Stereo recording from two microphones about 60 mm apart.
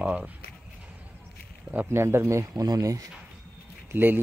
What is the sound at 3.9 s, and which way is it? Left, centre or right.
Speech, right.